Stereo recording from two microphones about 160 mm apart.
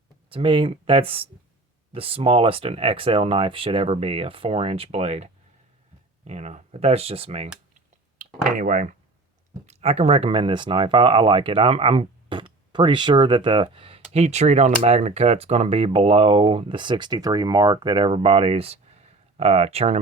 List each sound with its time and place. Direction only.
0.3 s speech: 35° right (ahead or behind)
8.2 s speech: 55° right (ahead or behind)
9.6 s speech: 40° right (ahead or behind)